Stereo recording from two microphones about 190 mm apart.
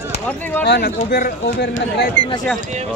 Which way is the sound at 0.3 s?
10° left (ahead or behind).